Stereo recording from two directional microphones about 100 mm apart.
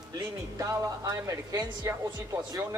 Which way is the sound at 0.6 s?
35° right (ahead or behind).